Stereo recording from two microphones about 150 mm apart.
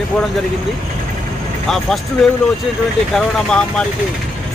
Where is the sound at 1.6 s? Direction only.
Centre (ahead or behind).